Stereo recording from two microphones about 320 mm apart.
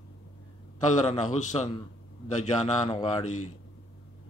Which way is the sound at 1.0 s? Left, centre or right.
Centre.